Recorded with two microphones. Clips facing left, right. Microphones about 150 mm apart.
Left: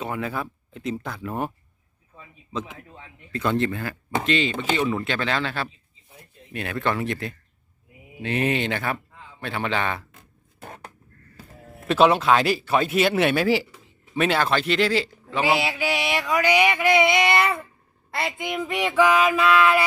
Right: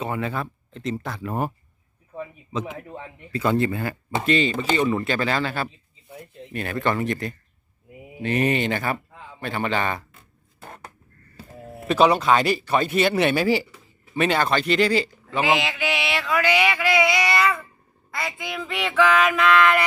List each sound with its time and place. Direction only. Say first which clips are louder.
0.0 s a man's voice: right 1 dB; centre (ahead or behind)
2.7 s a man's voice: right 9 dB; 70° right (ahead or behind)
3.3 s speech: right 2 dB; 5° right (ahead or behind)
11.9 s speech: even; centre (ahead or behind)
15.4 s a sound: even; 10° left (ahead or behind)
15.7 s mantra: left 1 dB; 35° left (ahead or behind)
16.1 s speech: left 1 dB; 15° left (ahead or behind)
18.2 s a sound: left 3 dB; 20° left (ahead or behind)